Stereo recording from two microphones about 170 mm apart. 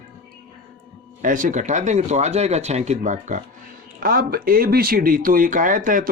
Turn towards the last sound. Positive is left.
turn(degrees=-50)  # may be behind; listen again after turning